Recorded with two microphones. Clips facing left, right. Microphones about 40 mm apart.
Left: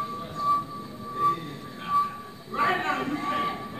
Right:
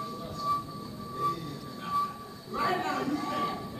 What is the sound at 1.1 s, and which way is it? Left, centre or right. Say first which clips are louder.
Music: left 6 dB; left.